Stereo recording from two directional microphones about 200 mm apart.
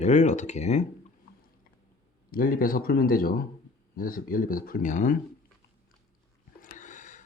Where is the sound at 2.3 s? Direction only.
45° left (ahead or behind).